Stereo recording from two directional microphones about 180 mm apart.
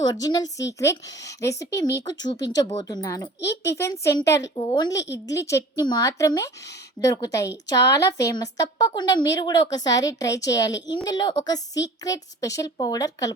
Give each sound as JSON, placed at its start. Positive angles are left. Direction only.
{"t": 0.0, "sound": "a woman's voice", "side_deg": 20}